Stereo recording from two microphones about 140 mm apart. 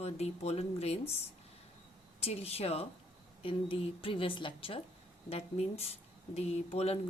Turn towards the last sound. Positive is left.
turn(degrees=45)  # may be behind; listen again after turning